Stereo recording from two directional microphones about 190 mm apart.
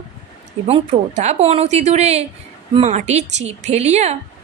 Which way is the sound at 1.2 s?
35° right (ahead or behind).